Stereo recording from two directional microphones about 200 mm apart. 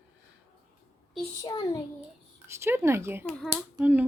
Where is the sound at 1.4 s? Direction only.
20° left (ahead or behind).